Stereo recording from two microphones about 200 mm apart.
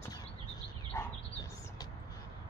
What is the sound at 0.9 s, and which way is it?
Dog, 20° left (ahead or behind).